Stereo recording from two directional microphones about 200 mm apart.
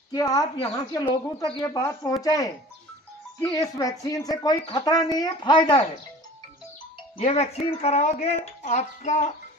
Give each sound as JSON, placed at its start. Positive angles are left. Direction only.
{"t": 0.1, "sound": "speech", "side_deg": 20}
{"t": 7.2, "sound": "speech", "side_deg": 35}